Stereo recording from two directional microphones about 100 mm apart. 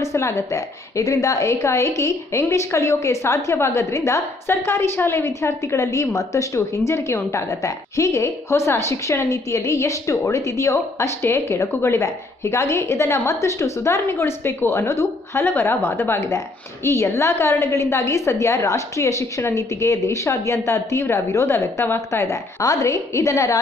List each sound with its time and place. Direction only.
0.0 s a woman's voice: 30° left (ahead or behind)